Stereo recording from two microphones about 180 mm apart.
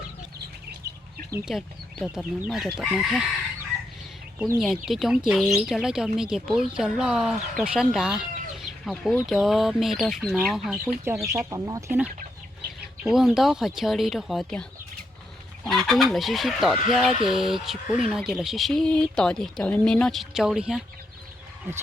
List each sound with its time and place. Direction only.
0.8 s chicken: 60° right (ahead or behind)
1.5 s speech: centre (ahead or behind)
4.4 s speech: 5° right (ahead or behind)
11.0 s speech: 15° right (ahead or behind)
13.1 s speech: centre (ahead or behind)